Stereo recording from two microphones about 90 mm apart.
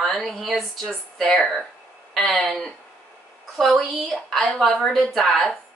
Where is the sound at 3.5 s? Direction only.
Centre (ahead or behind).